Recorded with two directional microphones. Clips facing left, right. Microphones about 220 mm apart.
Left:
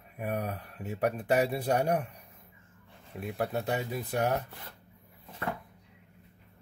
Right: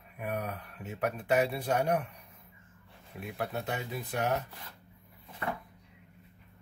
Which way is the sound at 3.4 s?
40° left (ahead or behind).